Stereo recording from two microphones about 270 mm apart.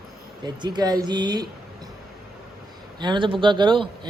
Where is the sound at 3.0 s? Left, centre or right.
Centre.